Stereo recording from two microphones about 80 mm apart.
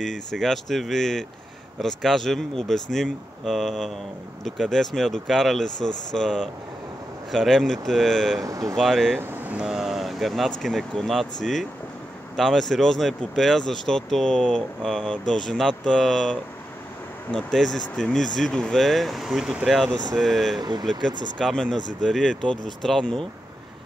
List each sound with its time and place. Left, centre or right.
0.0 s speech: centre
8.5 s speech: right
8.7 s speech: centre
9.2 s speech: right
9.7 s speech: centre
12.4 s speech: centre
19.9 s speech: right
20.2 s speech: centre
20.9 s speech: right
21.4 s speech: centre